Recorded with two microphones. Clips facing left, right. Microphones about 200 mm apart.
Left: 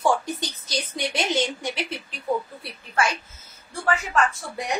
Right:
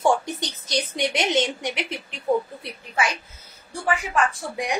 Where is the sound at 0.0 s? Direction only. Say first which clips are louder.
Right 2 dB; 25° right (ahead or behind).